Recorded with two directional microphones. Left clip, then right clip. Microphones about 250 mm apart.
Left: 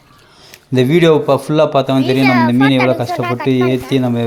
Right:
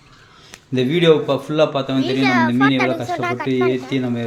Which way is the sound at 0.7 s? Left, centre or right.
Left.